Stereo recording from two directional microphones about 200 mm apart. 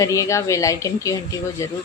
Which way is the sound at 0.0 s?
15° left (ahead or behind).